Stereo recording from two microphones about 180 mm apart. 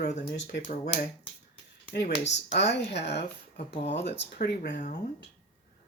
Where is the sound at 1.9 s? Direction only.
70° left (ahead or behind).